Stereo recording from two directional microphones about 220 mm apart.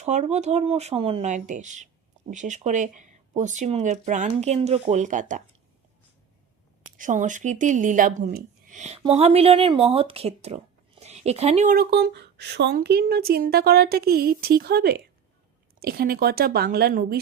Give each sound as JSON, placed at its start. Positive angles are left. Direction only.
{"t": 0.0, "sound": "speech", "side_deg": -30}
{"t": 6.9, "sound": "a woman's voice", "side_deg": -35}